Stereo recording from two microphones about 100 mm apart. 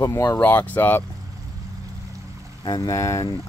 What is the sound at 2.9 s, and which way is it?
Speech, 30° left (ahead or behind).